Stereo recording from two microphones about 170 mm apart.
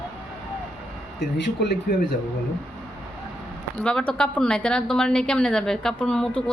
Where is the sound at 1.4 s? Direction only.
80° left.